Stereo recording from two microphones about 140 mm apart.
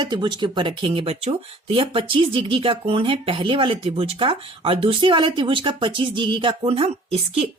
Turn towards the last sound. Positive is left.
turn(degrees=-45)  # may be behind; listen again after turning